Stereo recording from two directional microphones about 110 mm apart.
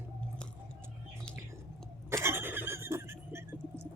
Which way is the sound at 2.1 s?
25° right (ahead or behind).